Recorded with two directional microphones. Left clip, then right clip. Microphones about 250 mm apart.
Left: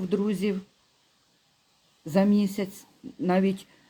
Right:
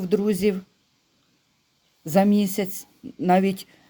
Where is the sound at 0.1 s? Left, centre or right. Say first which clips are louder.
Right 7 dB; right.